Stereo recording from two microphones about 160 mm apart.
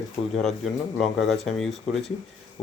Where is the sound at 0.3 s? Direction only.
Centre (ahead or behind).